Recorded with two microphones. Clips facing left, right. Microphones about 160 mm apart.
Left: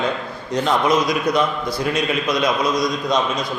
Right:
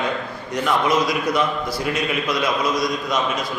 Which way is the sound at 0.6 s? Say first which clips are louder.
Left 1 dB; 25° left (ahead or behind).